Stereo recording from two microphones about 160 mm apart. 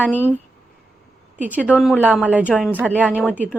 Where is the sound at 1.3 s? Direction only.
10° right (ahead or behind).